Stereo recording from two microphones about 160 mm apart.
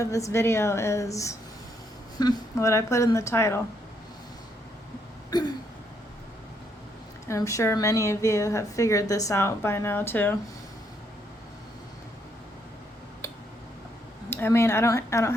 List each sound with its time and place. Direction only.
0.0 s a woman's voice: 20° left (ahead or behind)
5.3 s speech: 25° left (ahead or behind)
7.3 s speech: 20° left (ahead or behind)
14.3 s a woman's voice: 15° left (ahead or behind)